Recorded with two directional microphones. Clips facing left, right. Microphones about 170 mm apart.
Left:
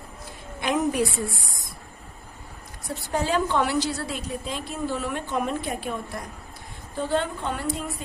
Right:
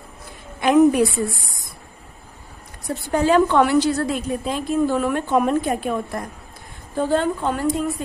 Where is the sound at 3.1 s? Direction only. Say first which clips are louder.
Right 8 dB; 60° right (ahead or behind).